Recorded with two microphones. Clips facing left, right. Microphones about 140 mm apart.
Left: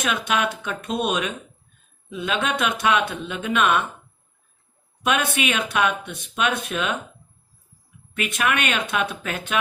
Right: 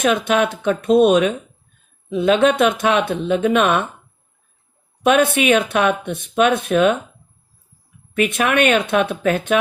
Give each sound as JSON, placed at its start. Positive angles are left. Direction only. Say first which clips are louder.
{"t": 0.0, "sound": "speech", "louder": "right 7 dB", "side_deg": -45}
{"t": 5.0, "sound": "speech", "louder": "right 8 dB", "side_deg": -50}
{"t": 8.1, "sound": "speech", "louder": "right 7 dB", "side_deg": -45}